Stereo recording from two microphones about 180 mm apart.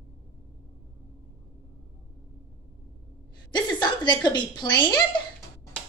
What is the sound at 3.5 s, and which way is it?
A woman's voice, 25° left (ahead or behind).